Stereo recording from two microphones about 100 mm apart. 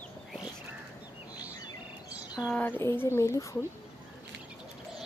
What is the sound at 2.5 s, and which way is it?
Speech, 15° left (ahead or behind).